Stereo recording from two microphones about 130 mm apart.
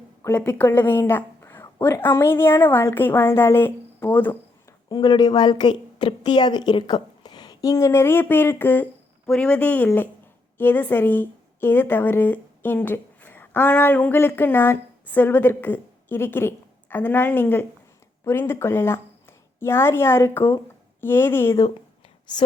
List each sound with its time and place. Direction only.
0.2 s a woman's voice: 15° left (ahead or behind)
4.9 s a woman's voice: 35° left (ahead or behind)